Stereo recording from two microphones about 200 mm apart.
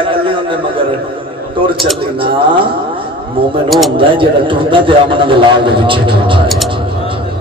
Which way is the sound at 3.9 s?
25° right (ahead or behind).